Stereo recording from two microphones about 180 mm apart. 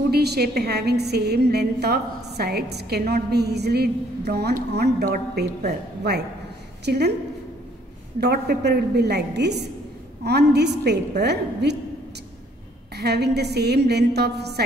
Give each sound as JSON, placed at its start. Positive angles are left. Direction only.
{"t": 0.1, "sound": "a woman's voice", "side_deg": -65}
{"t": 8.2, "sound": "a woman's voice", "side_deg": -65}
{"t": 12.9, "sound": "a woman's voice", "side_deg": -65}